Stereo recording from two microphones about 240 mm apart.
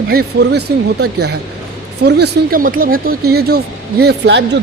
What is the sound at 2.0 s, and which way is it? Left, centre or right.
A man's voice, right.